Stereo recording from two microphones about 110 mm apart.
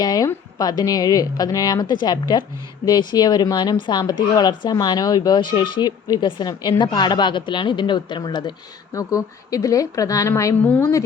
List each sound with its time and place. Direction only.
0.0 s a sound: 35° left (ahead or behind)
0.6 s speech: 35° left (ahead or behind)
8.9 s speech: 30° left (ahead or behind)